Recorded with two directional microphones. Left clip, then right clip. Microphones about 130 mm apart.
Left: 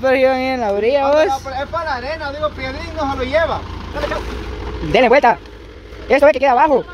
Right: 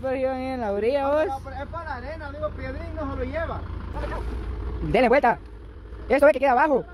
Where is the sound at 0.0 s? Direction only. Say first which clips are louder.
Left 12 dB; 20° left (ahead or behind).